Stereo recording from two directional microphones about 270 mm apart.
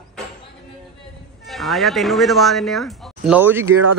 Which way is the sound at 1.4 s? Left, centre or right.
Centre.